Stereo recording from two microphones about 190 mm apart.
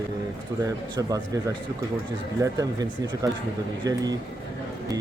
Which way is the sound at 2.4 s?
20° right (ahead or behind).